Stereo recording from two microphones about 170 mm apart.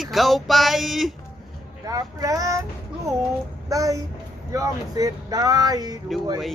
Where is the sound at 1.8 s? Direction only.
20° right (ahead or behind).